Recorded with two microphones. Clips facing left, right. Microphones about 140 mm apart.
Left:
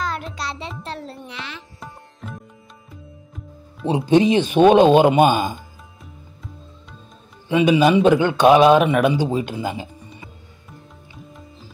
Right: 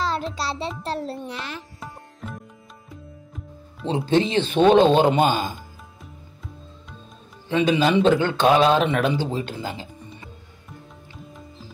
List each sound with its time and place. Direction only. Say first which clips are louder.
0.0 s music: right 2 dB; 30° right (ahead or behind)
0.8 s a child's voice: right 4 dB; 40° right (ahead or behind)
1.8 s tabla: even; centre (ahead or behind)
3.8 s speech: left 5 dB; 15° left (ahead or behind)
7.4 s speech: left 4 dB; 15° left (ahead or behind)